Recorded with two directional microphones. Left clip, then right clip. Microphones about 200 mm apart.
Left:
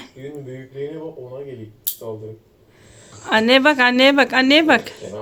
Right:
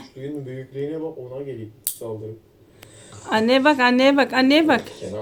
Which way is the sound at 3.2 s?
Centre (ahead or behind).